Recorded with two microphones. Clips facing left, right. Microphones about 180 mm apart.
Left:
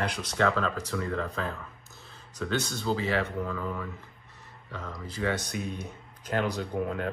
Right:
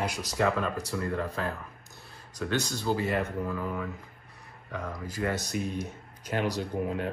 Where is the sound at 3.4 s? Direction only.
5° right (ahead or behind).